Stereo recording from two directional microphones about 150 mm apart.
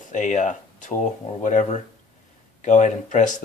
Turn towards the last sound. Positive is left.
turn(degrees=55)  # may be behind; listen again after turning